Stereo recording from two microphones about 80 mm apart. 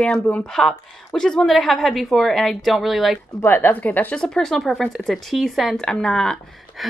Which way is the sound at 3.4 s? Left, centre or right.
Left.